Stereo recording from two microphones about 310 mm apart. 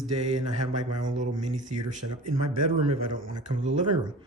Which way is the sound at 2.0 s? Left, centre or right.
Right.